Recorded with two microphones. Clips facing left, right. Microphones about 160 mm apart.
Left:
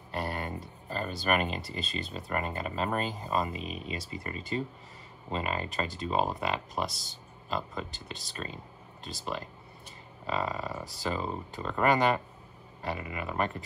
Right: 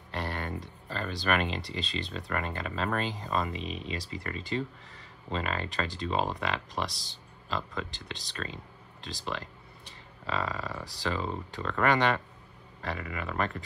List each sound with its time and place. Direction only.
0.1 s speech: 5° left (ahead or behind)
9.8 s a sound: 5° left (ahead or behind)
10.9 s speech: 5° left (ahead or behind)
13.2 s speech: 5° left (ahead or behind)